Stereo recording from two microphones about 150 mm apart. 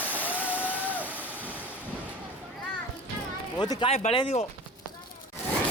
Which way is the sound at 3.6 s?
30° left (ahead or behind).